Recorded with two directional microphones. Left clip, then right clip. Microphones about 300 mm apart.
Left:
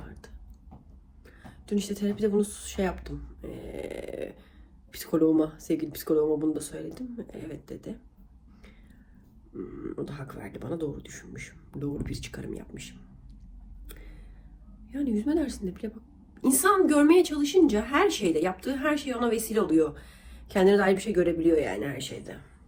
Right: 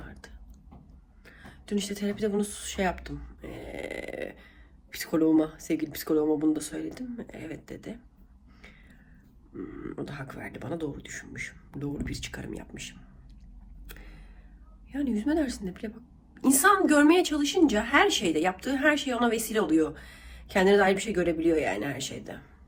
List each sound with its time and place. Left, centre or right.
1.2 s speech: centre
3.8 s a sound: centre
4.9 s a woman's voice: centre
9.8 s a woman's voice: centre
14.8 s a woman's voice: centre